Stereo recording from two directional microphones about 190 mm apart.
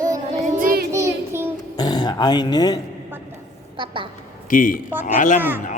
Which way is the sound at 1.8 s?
20° left (ahead or behind).